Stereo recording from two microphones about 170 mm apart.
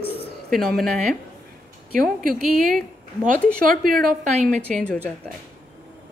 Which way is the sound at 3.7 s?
55° right (ahead or behind).